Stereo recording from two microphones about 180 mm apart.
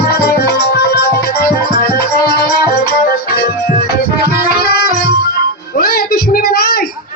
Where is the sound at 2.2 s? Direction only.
60° left (ahead or behind).